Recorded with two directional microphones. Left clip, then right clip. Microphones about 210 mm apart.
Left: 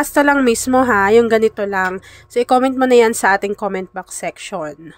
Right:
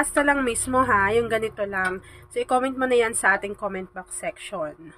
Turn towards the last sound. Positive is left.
turn(degrees=40)  # may be behind; listen again after turning